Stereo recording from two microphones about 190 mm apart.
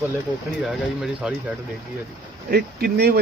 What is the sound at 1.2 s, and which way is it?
Speech, 5° right (ahead or behind).